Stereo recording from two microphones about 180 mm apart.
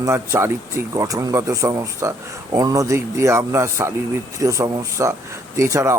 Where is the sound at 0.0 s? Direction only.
15° right (ahead or behind).